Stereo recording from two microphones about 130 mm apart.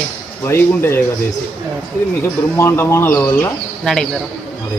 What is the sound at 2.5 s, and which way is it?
Speech, 20° left (ahead or behind).